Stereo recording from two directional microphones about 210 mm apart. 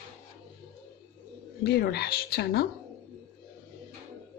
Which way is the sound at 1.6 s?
50° left (ahead or behind).